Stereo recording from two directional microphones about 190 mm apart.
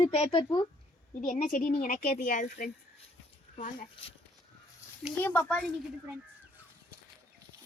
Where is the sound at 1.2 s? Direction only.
45° left (ahead or behind).